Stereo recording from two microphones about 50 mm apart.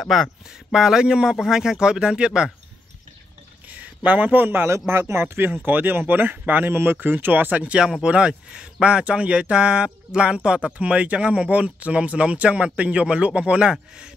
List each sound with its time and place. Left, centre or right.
0.0 s speech: centre
0.7 s speech: centre
3.7 s a man's voice: right
4.6 s speech: right
5.2 s speech: right
6.7 s speech: right
8.0 s speech: right